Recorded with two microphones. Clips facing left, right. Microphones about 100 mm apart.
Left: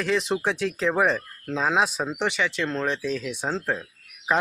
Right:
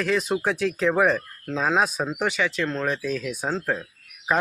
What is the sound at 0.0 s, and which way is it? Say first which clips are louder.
A man's voice: right 1 dB; 20° left (ahead or behind).